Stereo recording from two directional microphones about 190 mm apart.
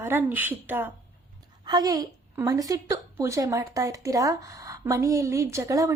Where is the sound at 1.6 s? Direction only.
20° right (ahead or behind).